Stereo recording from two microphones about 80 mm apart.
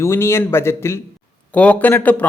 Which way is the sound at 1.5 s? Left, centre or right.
Centre.